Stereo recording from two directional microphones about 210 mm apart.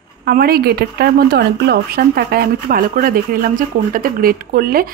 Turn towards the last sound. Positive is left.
turn(degrees=-45)  # may be behind; listen again after turning